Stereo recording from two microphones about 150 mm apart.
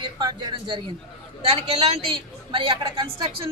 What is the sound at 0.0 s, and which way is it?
Speech, 30° right (ahead or behind).